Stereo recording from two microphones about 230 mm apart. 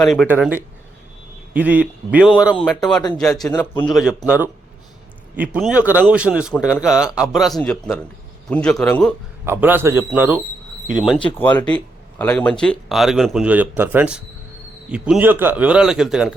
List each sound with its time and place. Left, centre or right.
0.0 s a man's voice: centre
9.4 s a man's voice: centre
12.2 s speech: centre